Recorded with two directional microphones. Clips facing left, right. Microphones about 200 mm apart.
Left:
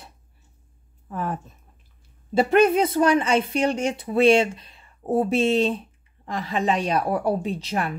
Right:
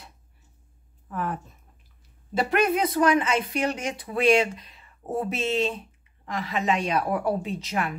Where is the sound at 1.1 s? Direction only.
30° left (ahead or behind).